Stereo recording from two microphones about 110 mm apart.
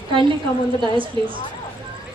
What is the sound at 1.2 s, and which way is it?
Speech, 50° right (ahead or behind).